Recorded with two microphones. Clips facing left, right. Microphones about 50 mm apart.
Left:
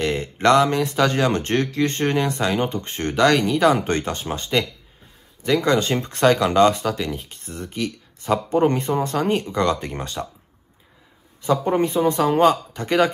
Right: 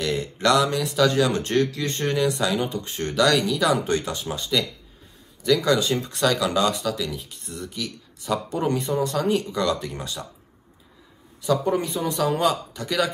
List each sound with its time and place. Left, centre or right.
0.0 s speech: left
11.4 s speech: left